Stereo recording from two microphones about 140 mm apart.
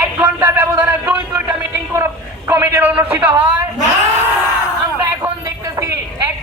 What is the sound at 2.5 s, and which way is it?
Speech, 15° right (ahead or behind).